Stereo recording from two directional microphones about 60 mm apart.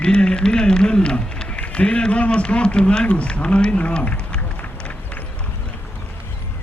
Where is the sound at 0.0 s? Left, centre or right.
Centre.